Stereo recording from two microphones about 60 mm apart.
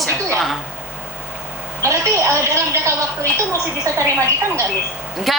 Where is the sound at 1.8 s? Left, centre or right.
Right.